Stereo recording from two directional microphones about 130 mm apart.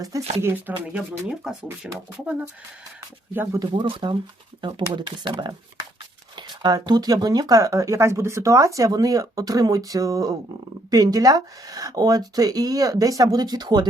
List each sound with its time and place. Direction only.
0.4 s speech: 15° right (ahead or behind)
3.6 s speech: 40° right (ahead or behind)